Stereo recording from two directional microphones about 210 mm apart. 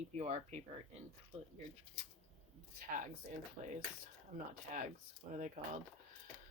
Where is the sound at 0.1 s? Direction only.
30° right (ahead or behind).